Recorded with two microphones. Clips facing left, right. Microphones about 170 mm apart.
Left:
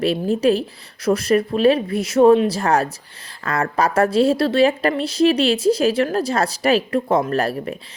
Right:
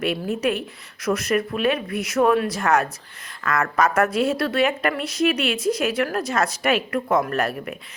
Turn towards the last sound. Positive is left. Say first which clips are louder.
# left 4 dB
turn(degrees=30)  # may be behind; listen again after turning